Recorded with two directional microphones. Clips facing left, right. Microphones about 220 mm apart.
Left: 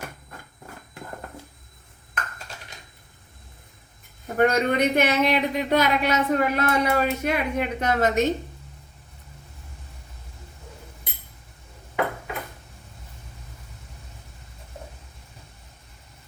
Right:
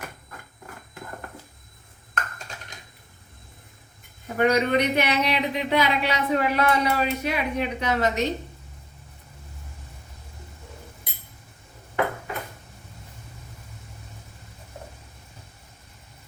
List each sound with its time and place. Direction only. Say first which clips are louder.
4.4 s speech: even; 50° left (ahead or behind)